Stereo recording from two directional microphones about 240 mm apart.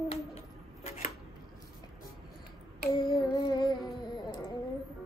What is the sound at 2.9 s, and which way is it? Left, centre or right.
Music, left.